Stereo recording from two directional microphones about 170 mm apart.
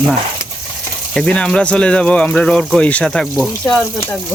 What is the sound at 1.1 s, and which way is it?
Speech, 5° left (ahead or behind).